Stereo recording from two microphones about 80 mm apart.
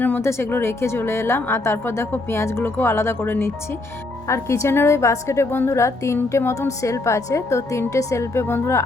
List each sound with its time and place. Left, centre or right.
0.2 s a woman's voice: left